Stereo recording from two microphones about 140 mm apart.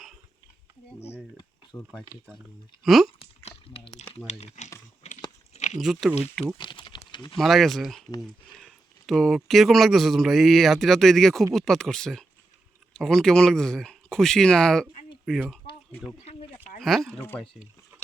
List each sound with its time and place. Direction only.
1.7 s speech: 20° left (ahead or behind)
2.8 s speech: centre (ahead or behind)
3.2 s a sound: 40° left (ahead or behind)
4.6 s typing: 55° left (ahead or behind)
5.0 s crunch: 50° left (ahead or behind)
5.8 s speech: centre (ahead or behind)
6.6 s a sound: 35° left (ahead or behind)
7.3 s speech: centre (ahead or behind)
16.2 s a sound: 45° left (ahead or behind)
16.8 s speech: centre (ahead or behind)